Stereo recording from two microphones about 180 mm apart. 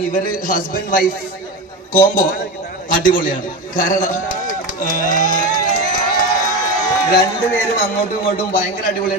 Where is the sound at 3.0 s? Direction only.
50° left (ahead or behind).